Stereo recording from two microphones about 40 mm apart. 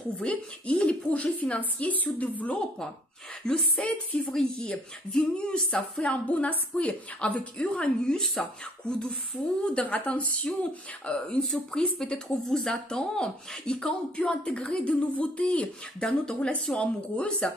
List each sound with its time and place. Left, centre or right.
0.2 s a woman's voice: left
3.4 s a woman's voice: left
4.3 s speech: left
5.8 s a woman's voice: left
9.8 s a woman's voice: left
11.1 s speech: left
11.4 s a woman's voice: centre